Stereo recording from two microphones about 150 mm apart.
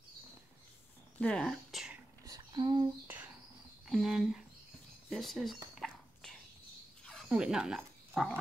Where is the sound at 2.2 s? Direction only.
25° right (ahead or behind).